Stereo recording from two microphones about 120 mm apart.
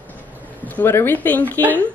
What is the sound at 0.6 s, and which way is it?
Speech, 15° left (ahead or behind).